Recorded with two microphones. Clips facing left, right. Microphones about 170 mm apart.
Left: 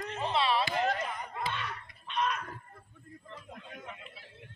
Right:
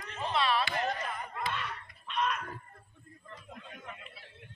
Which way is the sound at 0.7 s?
15° left (ahead or behind).